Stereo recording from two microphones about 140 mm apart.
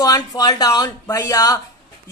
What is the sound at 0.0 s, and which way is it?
Speech, 25° left (ahead or behind).